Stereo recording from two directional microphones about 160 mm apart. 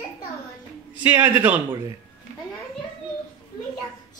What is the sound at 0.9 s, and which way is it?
Speech, 10° right (ahead or behind).